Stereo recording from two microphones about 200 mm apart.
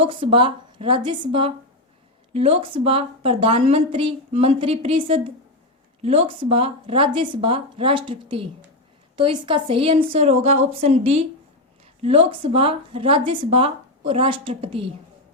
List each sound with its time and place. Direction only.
0.0 s speech: 25° right (ahead or behind)